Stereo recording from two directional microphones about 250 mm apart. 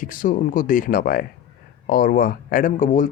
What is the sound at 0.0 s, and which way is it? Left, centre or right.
Speech, left.